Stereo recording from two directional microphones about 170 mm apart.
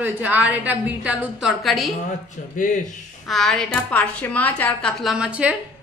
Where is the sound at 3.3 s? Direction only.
Centre (ahead or behind).